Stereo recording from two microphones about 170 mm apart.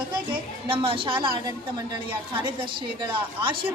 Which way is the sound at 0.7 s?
30° right (ahead or behind).